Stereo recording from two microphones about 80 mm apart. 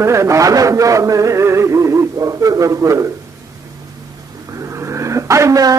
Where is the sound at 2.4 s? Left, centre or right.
Right.